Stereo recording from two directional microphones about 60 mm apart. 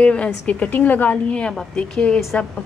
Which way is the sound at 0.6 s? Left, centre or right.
Left.